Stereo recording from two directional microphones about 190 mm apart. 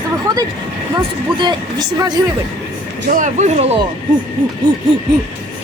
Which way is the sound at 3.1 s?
40° right (ahead or behind).